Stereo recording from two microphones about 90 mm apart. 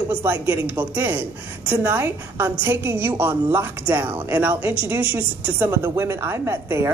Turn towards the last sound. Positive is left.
turn(degrees=-30)  # may be behind; listen again after turning